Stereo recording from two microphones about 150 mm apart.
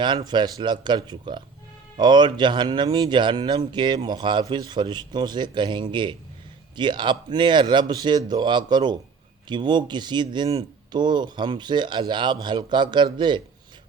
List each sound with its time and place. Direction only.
0.3 s speech: 30° right (ahead or behind)